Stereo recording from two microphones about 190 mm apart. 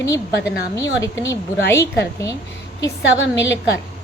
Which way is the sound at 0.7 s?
15° left (ahead or behind).